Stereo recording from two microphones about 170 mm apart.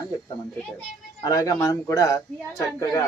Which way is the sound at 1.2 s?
20° left (ahead or behind).